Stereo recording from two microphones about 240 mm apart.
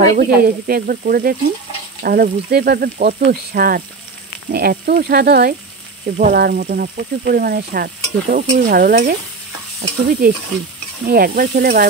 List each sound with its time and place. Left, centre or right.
0.0 s speech: right